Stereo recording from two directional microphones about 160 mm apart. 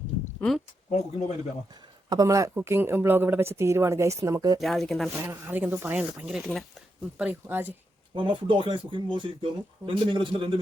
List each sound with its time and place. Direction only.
0.3 s a sound: centre (ahead or behind)
2.0 s speech: 20° right (ahead or behind)
4.6 s speech: centre (ahead or behind)
5.1 s speech: 15° right (ahead or behind)
8.1 s speech: 30° right (ahead or behind)